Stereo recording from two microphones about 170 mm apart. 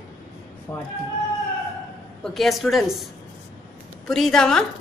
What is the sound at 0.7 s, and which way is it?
Speech, 10° left (ahead or behind).